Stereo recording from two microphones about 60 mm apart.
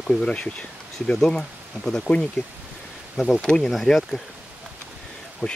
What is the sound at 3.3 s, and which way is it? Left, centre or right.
Speech, centre.